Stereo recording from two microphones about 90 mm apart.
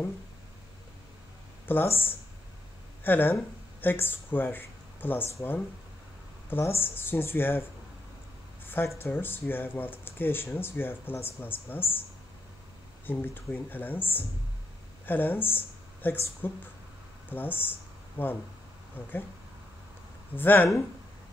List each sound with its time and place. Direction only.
1.7 s speech: 25° left (ahead or behind)
8.6 s speech: 25° left (ahead or behind)
13.0 s speech: 20° left (ahead or behind)
20.3 s speech: 20° left (ahead or behind)